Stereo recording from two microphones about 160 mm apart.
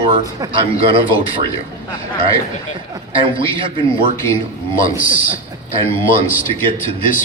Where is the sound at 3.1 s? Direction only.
35° right (ahead or behind).